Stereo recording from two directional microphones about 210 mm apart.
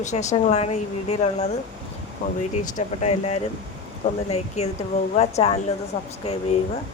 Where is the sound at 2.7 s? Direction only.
30° left (ahead or behind).